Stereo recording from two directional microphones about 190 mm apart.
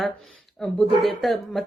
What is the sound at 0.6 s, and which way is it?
Speech, 5° left (ahead or behind).